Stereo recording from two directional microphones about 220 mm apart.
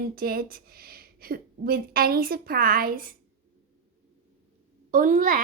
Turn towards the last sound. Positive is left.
turn(degrees=-35)  # may be behind; listen again after turning